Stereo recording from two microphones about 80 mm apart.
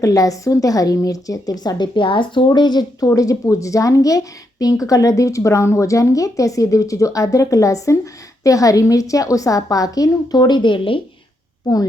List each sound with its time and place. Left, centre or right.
0.0 s a woman's voice: left
2.5 s speech: left
3.2 s a woman's voice: left
11.6 s a woman's voice: left